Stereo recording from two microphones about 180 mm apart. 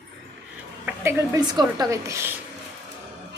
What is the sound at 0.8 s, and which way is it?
Speech, 15° right (ahead or behind).